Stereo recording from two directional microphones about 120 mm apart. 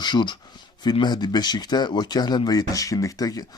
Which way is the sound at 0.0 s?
40° left (ahead or behind).